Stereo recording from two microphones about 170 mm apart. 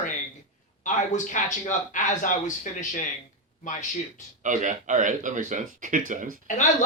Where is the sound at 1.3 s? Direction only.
50° left (ahead or behind).